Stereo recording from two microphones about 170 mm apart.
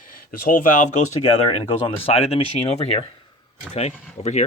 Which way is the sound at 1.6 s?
35° left (ahead or behind).